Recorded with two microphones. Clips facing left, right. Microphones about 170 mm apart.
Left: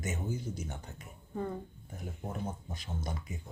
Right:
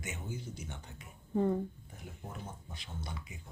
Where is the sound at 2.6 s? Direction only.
45° left (ahead or behind).